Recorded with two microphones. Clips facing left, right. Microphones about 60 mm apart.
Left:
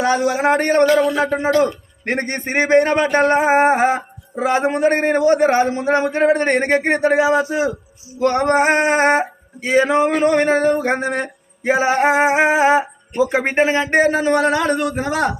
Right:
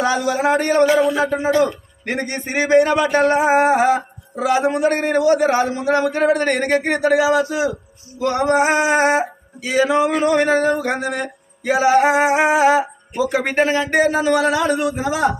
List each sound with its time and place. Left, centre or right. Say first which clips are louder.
0.4 s music: even; left
0.9 s speech: left 1 dB; centre
2.0 s music: left 2 dB; left
8.2 s male singing: left 1 dB; left
10.2 s music: left 1 dB; left
12.5 s speech: even; left
13.9 s male singing: even; left